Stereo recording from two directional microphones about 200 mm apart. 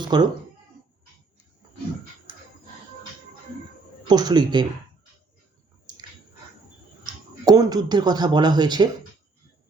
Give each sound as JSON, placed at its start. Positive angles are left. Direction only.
{"t": 0.0, "sound": "speech", "side_deg": -20}
{"t": 4.1, "sound": "speech", "side_deg": -20}
{"t": 7.4, "sound": "speech", "side_deg": -20}